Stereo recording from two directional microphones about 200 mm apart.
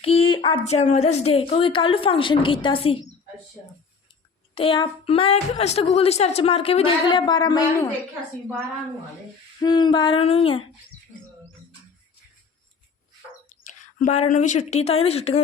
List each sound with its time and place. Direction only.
0.0 s a child's voice: 30° left (ahead or behind)
4.5 s a child's voice: 25° left (ahead or behind)
9.6 s a child's voice: 20° left (ahead or behind)
13.5 s speech: 40° left (ahead or behind)